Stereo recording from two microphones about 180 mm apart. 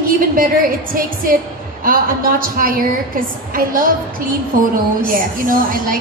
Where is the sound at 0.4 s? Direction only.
55° right (ahead or behind).